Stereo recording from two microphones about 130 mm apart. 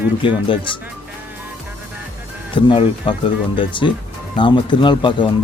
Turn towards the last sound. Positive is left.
turn(degrees=35)  # may be behind; listen again after turning